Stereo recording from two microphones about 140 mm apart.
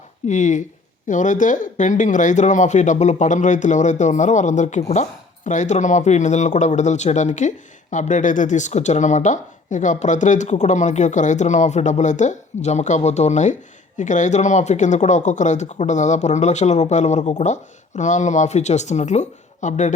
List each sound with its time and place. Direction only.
0.3 s speech: 60° left (ahead or behind)